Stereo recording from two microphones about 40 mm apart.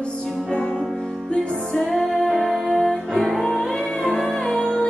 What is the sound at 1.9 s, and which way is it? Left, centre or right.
Music, centre.